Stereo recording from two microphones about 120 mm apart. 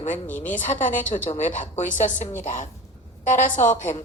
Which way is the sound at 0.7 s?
90° left.